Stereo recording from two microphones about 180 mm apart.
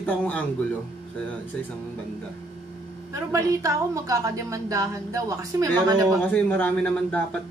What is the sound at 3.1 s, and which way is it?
A woman's voice, 15° right (ahead or behind).